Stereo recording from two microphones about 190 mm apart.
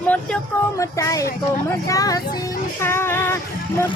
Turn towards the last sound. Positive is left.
turn(degrees=10)  # may be behind; listen again after turning